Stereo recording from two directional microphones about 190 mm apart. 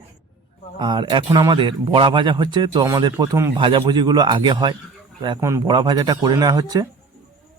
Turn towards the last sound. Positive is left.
turn(degrees=-20)  # may be behind; listen again after turning